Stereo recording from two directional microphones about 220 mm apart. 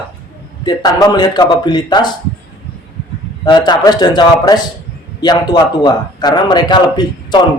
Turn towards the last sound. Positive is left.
turn(degrees=20)  # may be behind; listen again after turning